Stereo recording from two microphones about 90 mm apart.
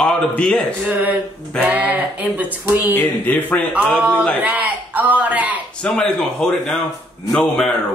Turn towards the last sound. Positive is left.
turn(degrees=5)  # may be behind; listen again after turning